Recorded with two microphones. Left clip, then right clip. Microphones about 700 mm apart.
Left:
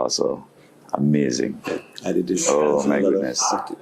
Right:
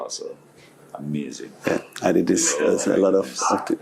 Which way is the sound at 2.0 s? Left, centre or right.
Right.